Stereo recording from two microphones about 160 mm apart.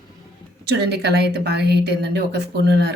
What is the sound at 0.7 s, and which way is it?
Speech, 90° right.